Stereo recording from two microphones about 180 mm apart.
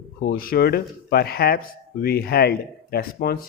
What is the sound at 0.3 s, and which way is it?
Speech, 55° left (ahead or behind).